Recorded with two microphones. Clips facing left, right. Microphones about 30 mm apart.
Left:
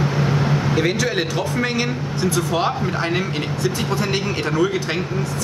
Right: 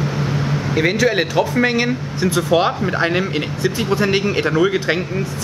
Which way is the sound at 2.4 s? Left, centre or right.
Right.